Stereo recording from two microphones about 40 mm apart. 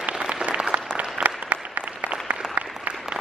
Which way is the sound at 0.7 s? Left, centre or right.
Right.